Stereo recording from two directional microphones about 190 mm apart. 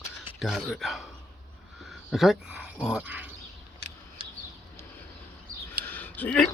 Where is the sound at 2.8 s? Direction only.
5° right (ahead or behind).